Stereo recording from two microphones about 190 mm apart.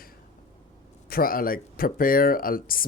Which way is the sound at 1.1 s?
50° left (ahead or behind).